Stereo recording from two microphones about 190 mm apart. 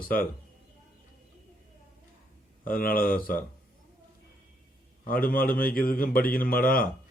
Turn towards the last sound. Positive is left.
turn(degrees=50)  # may be behind; listen again after turning